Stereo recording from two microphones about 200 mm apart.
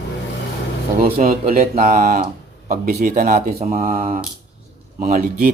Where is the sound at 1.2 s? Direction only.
40° right (ahead or behind).